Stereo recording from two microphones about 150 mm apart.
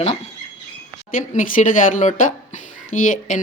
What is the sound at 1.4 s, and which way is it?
Speech, 60° left (ahead or behind).